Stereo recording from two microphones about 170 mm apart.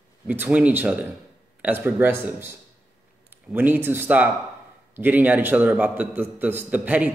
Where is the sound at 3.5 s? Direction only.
10° right (ahead or behind).